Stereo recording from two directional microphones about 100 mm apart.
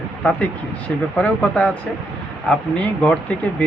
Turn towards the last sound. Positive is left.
turn(degrees=15)  # may be behind; listen again after turning